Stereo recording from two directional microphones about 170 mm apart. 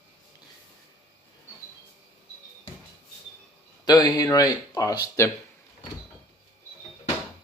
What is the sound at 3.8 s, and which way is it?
Speech, 25° left (ahead or behind).